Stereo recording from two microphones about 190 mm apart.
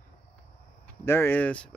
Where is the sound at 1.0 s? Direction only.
10° left (ahead or behind).